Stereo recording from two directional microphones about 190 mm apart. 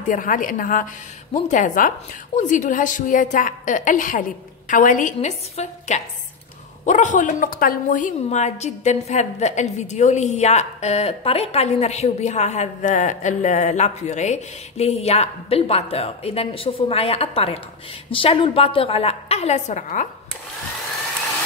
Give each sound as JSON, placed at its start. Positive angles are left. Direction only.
{"t": 0.1, "sound": "a woman's voice", "side_deg": 45}